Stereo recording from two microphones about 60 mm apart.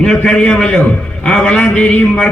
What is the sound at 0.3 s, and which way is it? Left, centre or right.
A man's voice, centre.